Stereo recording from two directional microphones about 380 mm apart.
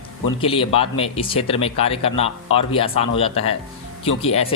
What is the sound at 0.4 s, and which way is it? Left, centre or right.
Speech, centre.